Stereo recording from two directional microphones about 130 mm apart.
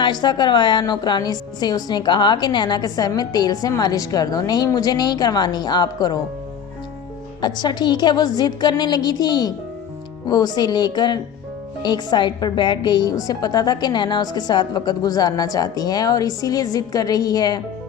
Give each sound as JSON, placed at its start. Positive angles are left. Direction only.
{"t": 0.0, "sound": "a woman's voice", "side_deg": 35}
{"t": 7.4, "sound": "a woman's voice", "side_deg": 35}